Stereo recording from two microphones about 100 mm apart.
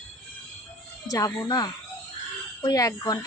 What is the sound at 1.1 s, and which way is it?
Speech, 35° left (ahead or behind).